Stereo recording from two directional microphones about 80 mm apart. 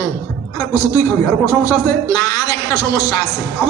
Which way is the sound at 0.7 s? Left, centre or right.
Left.